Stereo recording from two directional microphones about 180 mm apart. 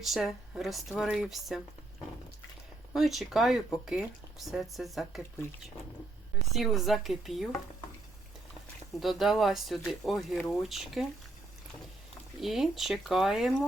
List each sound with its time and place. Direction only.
0.0 s speech: centre (ahead or behind)
2.9 s speech: centre (ahead or behind)
6.5 s speech: centre (ahead or behind)
8.9 s speech: centre (ahead or behind)
12.4 s speech: centre (ahead or behind)